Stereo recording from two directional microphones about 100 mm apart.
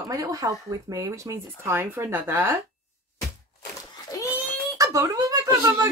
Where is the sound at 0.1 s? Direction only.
35° right (ahead or behind).